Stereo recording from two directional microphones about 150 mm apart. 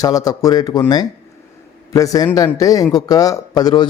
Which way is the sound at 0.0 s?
25° left (ahead or behind).